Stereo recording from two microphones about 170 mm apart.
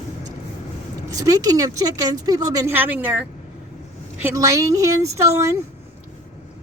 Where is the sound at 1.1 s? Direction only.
20° right (ahead or behind).